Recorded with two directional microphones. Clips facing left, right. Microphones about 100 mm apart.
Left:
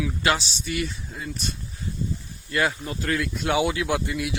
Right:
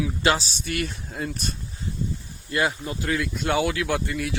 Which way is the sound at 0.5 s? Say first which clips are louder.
Even; 55° right (ahead or behind).